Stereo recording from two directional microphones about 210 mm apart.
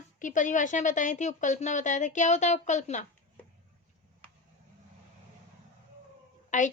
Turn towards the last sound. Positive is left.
turn(degrees=35)  # may be behind; listen again after turning